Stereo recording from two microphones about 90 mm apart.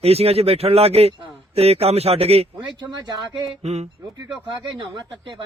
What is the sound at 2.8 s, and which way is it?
Speech, 55° right (ahead or behind).